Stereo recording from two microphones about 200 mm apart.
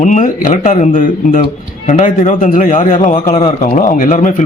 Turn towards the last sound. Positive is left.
turn(degrees=40)  # may be behind; listen again after turning